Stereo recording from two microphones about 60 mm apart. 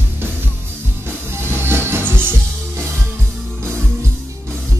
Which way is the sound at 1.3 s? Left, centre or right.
Right.